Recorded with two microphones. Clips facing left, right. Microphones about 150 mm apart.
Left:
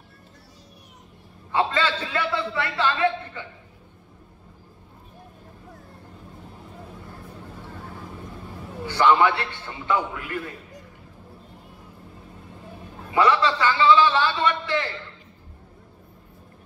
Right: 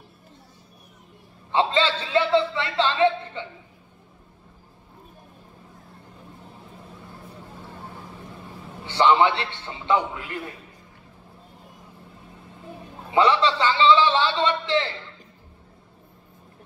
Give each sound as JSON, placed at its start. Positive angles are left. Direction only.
{"t": 1.5, "sound": "a man's voice", "side_deg": -25}
{"t": 8.8, "sound": "a man's voice", "side_deg": -20}
{"t": 13.1, "sound": "a man's voice", "side_deg": -25}